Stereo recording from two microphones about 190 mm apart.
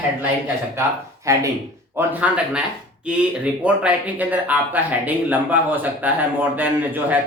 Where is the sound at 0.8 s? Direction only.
15° right (ahead or behind).